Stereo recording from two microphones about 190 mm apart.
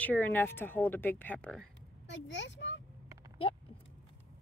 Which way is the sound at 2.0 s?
70° left (ahead or behind).